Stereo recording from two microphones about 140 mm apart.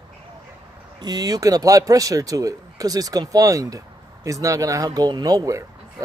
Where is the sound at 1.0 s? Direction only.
30° right (ahead or behind).